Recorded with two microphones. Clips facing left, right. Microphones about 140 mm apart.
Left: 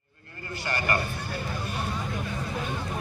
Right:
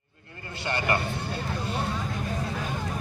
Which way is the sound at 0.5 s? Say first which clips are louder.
Right 1 dB; 20° right (ahead or behind).